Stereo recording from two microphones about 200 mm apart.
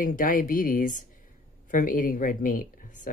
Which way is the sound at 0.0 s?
45° left (ahead or behind).